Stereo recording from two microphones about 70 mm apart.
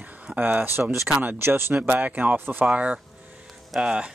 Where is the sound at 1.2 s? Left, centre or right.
Right.